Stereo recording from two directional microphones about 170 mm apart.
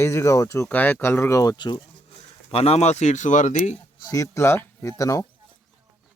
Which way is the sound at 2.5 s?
35° left (ahead or behind).